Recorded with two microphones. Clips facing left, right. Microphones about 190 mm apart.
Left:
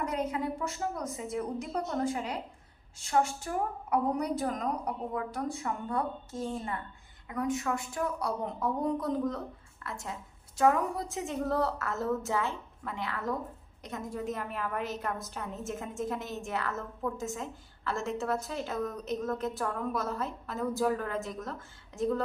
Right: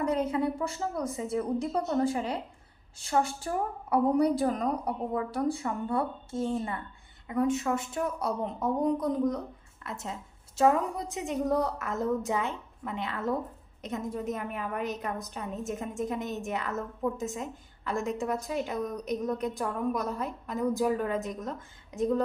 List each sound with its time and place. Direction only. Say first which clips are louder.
0.0 s a woman's voice: right 5 dB; 30° right (ahead or behind)